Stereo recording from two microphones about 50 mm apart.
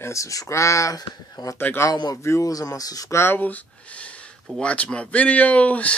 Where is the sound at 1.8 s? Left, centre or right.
Left.